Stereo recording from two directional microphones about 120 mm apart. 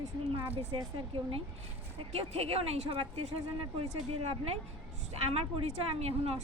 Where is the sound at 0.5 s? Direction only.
50° right (ahead or behind).